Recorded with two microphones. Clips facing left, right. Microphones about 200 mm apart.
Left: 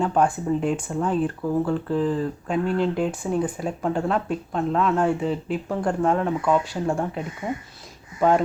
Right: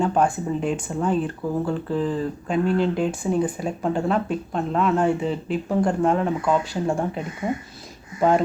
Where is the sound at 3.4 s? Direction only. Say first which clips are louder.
Right 1 dB; 15° right (ahead or behind).